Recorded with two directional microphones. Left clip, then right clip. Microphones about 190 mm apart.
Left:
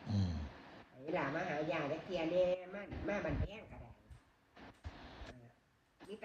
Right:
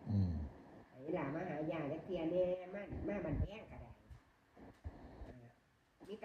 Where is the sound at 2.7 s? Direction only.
40° right (ahead or behind).